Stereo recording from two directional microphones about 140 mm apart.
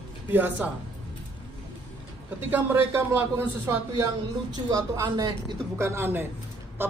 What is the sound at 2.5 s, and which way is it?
Speech, 15° right (ahead or behind).